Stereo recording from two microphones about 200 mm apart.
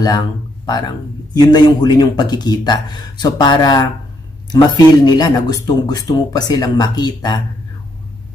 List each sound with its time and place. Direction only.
0.0 s a man's voice: 20° left (ahead or behind)